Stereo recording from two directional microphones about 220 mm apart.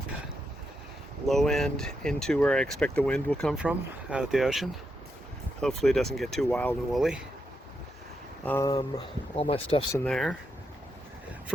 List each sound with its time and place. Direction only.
1.3 s speech: centre (ahead or behind)
8.4 s speech: 15° left (ahead or behind)
9.3 s speech: 25° left (ahead or behind)
9.9 s speech: 5° left (ahead or behind)